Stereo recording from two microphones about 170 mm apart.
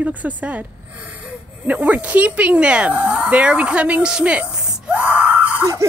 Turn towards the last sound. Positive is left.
turn(degrees=-10)  # may be behind; listen again after turning